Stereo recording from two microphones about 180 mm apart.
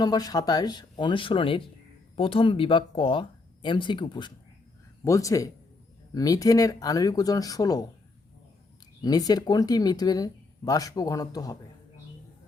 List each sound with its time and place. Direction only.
0.0 s speech: 20° left (ahead or behind)
9.0 s speech: 20° left (ahead or behind)